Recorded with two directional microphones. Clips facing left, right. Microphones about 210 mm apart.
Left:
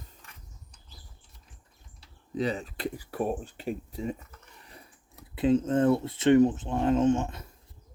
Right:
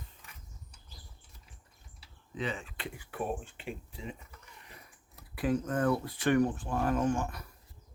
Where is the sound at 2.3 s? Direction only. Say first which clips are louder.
Left 7 dB; 40° left (ahead or behind).